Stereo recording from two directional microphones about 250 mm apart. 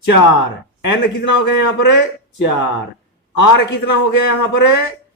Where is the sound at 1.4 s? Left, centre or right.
Left.